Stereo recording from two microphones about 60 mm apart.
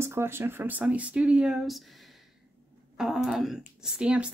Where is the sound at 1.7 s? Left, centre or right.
Centre.